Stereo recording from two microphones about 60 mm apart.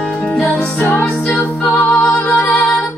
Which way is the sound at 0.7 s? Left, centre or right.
Left.